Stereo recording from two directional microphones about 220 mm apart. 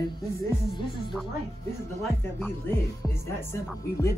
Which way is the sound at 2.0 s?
Centre (ahead or behind).